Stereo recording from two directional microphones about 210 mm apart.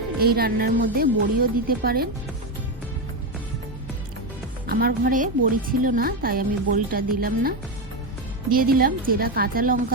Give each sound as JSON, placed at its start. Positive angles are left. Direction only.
{"t": 0.2, "sound": "a woman's voice", "side_deg": -45}
{"t": 4.6, "sound": "a woman's voice", "side_deg": -45}